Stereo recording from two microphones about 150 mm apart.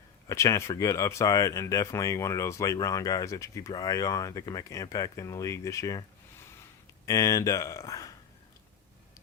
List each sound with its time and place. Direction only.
0.3 s speech: 20° left (ahead or behind)